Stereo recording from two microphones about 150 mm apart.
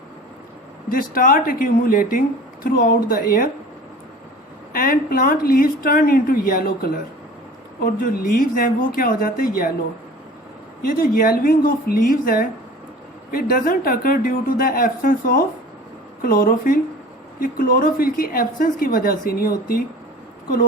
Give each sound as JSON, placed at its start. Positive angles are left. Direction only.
{"t": 0.9, "sound": "a woman's voice", "side_deg": 70}
{"t": 4.7, "sound": "a woman's voice", "side_deg": 70}
{"t": 10.8, "sound": "a woman's voice", "side_deg": 70}
{"t": 16.2, "sound": "a woman's voice", "side_deg": 70}